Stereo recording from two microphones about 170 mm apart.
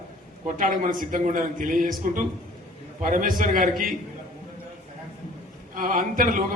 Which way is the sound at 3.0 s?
50° right (ahead or behind).